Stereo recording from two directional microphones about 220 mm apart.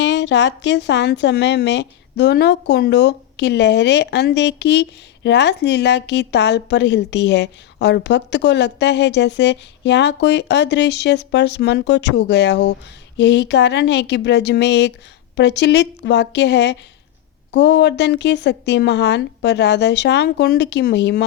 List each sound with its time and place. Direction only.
0.0 s a woman's voice: 55° left (ahead or behind)